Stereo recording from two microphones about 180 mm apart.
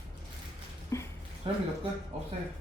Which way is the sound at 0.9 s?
15° left (ahead or behind).